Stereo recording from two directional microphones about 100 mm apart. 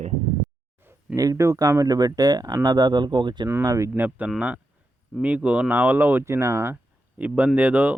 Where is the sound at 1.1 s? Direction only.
35° right (ahead or behind).